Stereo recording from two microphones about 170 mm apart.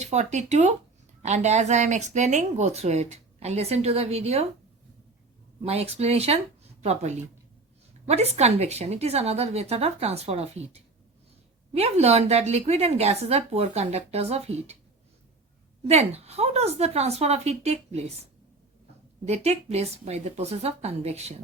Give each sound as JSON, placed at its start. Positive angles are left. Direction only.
{"t": 0.0, "sound": "a woman's voice", "side_deg": -40}
{"t": 5.6, "sound": "a woman's voice", "side_deg": -35}
{"t": 15.9, "sound": "a woman's voice", "side_deg": -40}
{"t": 19.2, "sound": "a woman's voice", "side_deg": -40}